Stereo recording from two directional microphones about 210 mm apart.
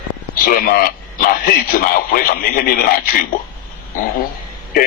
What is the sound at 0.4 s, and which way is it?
Speech, 45° left (ahead or behind).